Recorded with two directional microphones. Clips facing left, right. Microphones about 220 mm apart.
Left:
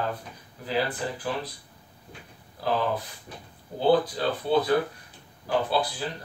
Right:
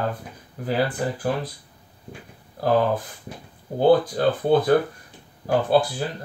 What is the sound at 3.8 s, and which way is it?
Speech, 50° right (ahead or behind).